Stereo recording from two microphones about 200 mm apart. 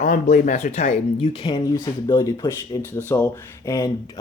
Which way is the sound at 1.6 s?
15° left (ahead or behind).